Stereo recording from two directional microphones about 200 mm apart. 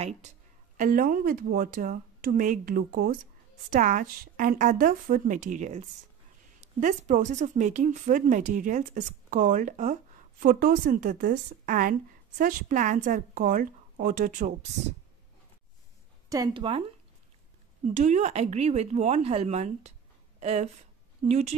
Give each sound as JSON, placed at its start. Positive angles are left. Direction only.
{"t": 0.7, "sound": "a woman's voice", "side_deg": -40}
{"t": 16.3, "sound": "a woman's voice", "side_deg": -15}
{"t": 17.8, "sound": "a woman's voice", "side_deg": -35}